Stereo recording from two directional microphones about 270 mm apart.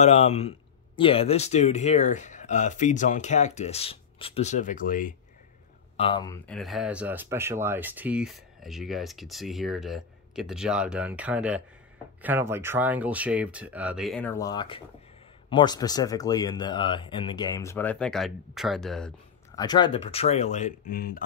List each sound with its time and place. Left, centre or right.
0.0 s speech: left
5.9 s speech: centre
19.5 s speech: centre; by 21.2 s left